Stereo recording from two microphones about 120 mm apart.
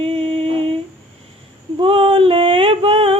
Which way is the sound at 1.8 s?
50° right (ahead or behind).